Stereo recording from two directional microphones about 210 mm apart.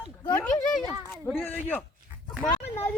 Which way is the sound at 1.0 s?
Centre (ahead or behind).